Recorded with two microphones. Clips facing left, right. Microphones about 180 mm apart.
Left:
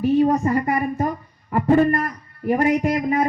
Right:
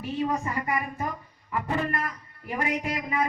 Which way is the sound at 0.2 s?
45° left (ahead or behind).